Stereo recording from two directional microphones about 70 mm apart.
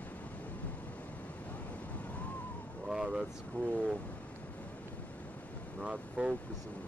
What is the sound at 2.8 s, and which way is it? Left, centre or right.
Vehicle, centre.